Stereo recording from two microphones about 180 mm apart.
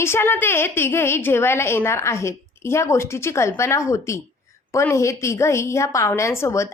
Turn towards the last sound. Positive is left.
turn(degrees=15)  # may be behind; listen again after turning